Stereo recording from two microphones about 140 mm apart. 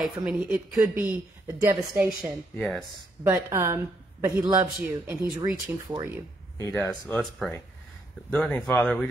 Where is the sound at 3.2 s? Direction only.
20° right (ahead or behind).